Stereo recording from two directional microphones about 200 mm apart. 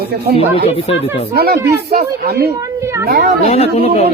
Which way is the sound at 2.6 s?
15° right (ahead or behind).